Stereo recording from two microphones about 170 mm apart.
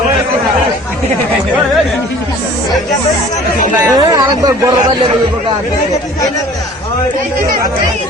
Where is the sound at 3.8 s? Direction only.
20° right (ahead or behind).